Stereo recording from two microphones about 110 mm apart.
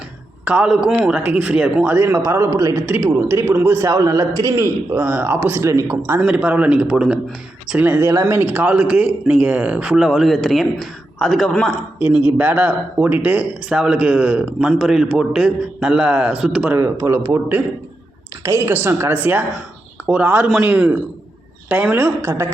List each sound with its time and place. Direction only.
0.4 s a man's voice: 10° right (ahead or behind)
6.2 s a man's voice: 15° right (ahead or behind); by 11.7 s centre (ahead or behind)
11.9 s a man's voice: 10° right (ahead or behind)
16.6 s a man's voice: 20° right (ahead or behind)